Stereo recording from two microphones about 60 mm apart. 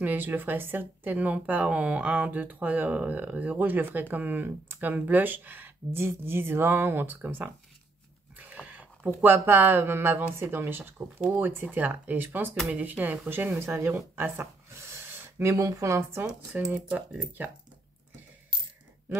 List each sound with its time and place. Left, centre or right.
0.0 s speech: right
5.9 s speech: right
8.4 s speech: right
13.3 s speech: right
16.7 s speech: centre